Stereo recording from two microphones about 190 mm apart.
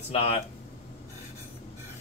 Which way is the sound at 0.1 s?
30° left (ahead or behind).